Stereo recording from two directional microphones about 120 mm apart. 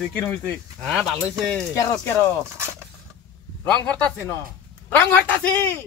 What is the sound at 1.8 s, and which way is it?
Speech, 25° left (ahead or behind).